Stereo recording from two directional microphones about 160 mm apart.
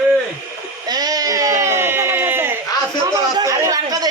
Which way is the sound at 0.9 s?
25° right (ahead or behind).